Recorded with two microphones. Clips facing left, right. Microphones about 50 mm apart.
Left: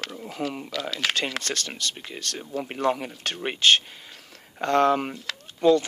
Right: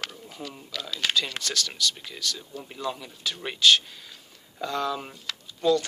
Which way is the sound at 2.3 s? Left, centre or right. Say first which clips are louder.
Left 8 dB; left.